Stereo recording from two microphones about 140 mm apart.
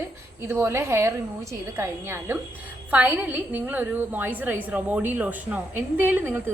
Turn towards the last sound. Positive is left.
turn(degrees=-15)  # may be behind; listen again after turning